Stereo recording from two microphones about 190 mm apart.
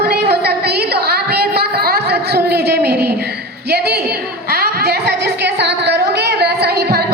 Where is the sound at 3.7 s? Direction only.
55° right (ahead or behind).